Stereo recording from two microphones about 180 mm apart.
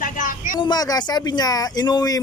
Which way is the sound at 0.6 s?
20° left (ahead or behind).